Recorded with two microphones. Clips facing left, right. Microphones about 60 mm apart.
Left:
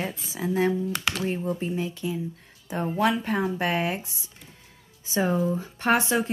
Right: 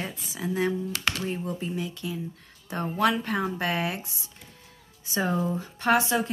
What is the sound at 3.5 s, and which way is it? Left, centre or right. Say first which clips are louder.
A woman's voice: left 2 dB; left.